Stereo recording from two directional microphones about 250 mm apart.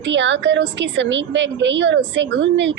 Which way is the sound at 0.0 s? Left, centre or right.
Right.